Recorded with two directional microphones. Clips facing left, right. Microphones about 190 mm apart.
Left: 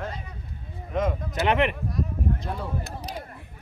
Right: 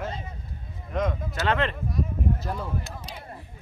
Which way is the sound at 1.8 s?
Centre (ahead or behind).